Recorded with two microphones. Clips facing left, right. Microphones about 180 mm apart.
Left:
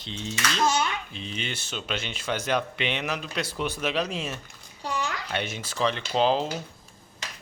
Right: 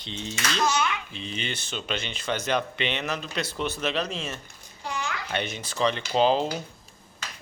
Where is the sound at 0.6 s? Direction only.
30° left (ahead or behind).